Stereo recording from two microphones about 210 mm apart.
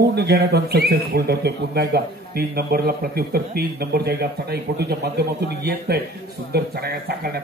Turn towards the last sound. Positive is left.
turn(degrees=-50)  # may be behind; listen again after turning